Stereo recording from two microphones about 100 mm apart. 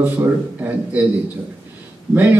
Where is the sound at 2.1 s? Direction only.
20° right (ahead or behind).